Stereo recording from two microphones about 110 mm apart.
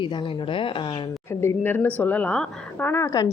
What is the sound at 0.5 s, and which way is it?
Speech, 50° left (ahead or behind).